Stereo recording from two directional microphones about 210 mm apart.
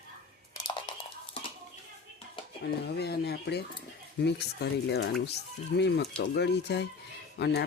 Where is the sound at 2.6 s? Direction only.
50° left (ahead or behind).